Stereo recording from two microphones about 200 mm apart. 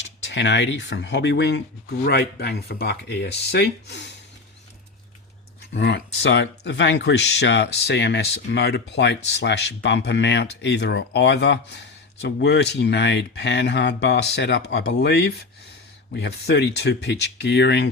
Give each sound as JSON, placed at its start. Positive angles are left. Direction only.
{"t": 0.3, "sound": "speech", "side_deg": 65}
{"t": 5.7, "sound": "speech", "side_deg": 60}